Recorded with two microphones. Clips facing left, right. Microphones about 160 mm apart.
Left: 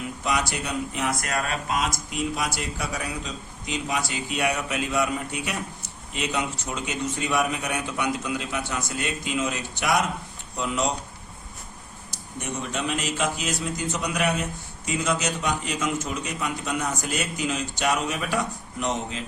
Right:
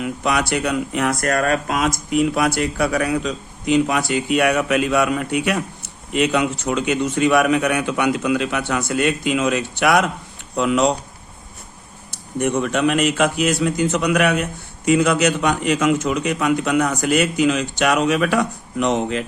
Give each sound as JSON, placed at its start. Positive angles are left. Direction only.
{"t": 0.0, "sound": "a man's voice", "side_deg": -70}
{"t": 12.1, "sound": "a man's voice", "side_deg": -60}